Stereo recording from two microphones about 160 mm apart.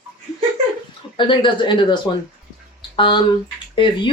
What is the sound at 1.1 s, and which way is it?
Speech, 30° left (ahead or behind).